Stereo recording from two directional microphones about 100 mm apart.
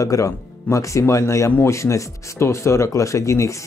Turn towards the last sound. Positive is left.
turn(degrees=30)  # may be behind; listen again after turning